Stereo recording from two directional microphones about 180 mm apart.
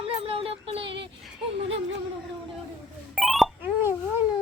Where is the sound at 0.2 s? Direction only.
30° right (ahead or behind).